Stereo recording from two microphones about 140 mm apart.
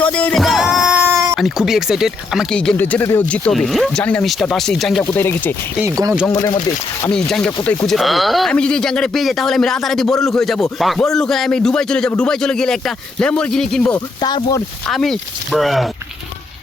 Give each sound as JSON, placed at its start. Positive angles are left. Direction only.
{"t": 0.0, "sound": "music", "side_deg": 10}
{"t": 1.0, "sound": "a sound", "side_deg": -20}
{"t": 1.4, "sound": "speech", "side_deg": 0}
{"t": 2.6, "sound": "speech", "side_deg": 10}
{"t": 5.1, "sound": "speech", "side_deg": 15}
{"t": 5.8, "sound": "speech", "side_deg": -20}
{"t": 7.1, "sound": "speech", "side_deg": 5}
{"t": 7.9, "sound": "speech", "side_deg": 0}
{"t": 14.2, "sound": "speech", "side_deg": 35}
{"t": 14.8, "sound": "speech", "side_deg": 5}